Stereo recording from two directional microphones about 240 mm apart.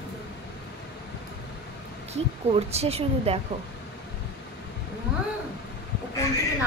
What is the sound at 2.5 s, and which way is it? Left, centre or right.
Speech, right.